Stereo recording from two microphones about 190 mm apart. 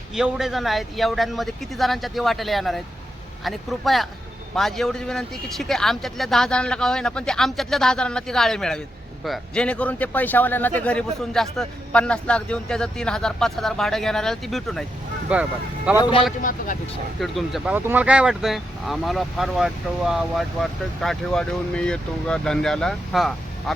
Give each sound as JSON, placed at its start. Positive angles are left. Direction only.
{"t": 0.1, "sound": "speech", "side_deg": 0}
{"t": 16.0, "sound": "a man's voice", "side_deg": 25}
{"t": 16.4, "sound": "speech", "side_deg": 45}
{"t": 17.2, "sound": "speech", "side_deg": 0}